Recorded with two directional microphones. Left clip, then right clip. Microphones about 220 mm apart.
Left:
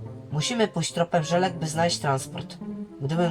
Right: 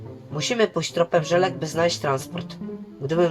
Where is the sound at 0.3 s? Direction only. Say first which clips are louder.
Right 4 dB; 30° right (ahead or behind).